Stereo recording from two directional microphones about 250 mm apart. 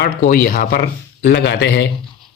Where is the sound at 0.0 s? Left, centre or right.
Left.